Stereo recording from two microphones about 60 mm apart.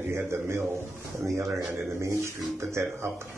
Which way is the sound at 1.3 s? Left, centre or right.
Right.